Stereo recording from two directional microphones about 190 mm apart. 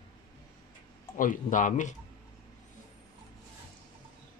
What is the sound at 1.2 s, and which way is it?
Speech, 45° left (ahead or behind).